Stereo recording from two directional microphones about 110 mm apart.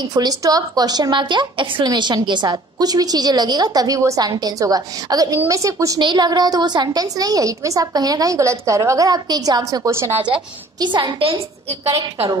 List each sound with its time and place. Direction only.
0.0 s a woman's voice: 40° right (ahead or behind)
5.9 s a woman's voice: 40° right (ahead or behind); by 10.2 s 25° right (ahead or behind)
10.8 s a woman's voice: 45° right (ahead or behind)